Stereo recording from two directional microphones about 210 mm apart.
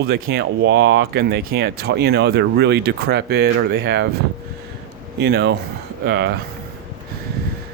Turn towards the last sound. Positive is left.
turn(degrees=-50)  # may be behind; listen again after turning